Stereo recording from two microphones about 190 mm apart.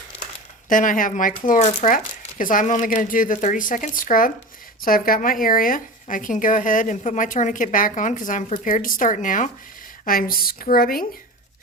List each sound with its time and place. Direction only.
0.7 s speech: 45° left (ahead or behind)